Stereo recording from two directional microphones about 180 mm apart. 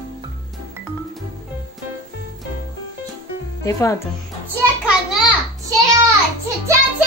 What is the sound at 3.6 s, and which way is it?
Speech, 20° left (ahead or behind).